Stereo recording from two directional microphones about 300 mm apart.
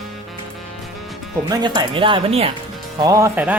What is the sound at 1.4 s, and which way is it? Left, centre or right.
Speech, centre.